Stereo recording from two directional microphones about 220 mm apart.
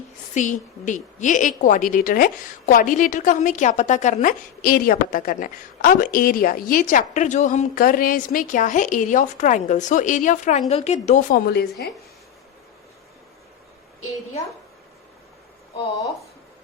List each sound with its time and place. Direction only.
0.3 s a woman's voice: 35° left (ahead or behind)